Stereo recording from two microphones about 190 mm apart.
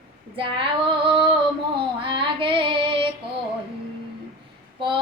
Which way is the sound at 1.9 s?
25° right (ahead or behind).